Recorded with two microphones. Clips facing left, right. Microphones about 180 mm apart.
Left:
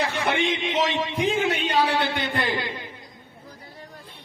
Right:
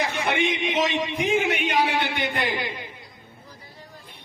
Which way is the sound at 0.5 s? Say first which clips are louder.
Even; 15° right (ahead or behind).